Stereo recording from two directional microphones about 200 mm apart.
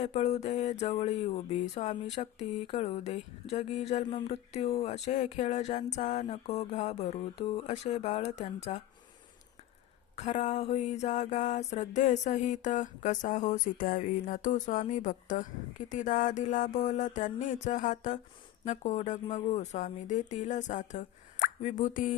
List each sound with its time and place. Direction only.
0.0 s mantra: 35° left (ahead or behind)
10.2 s mantra: 35° left (ahead or behind)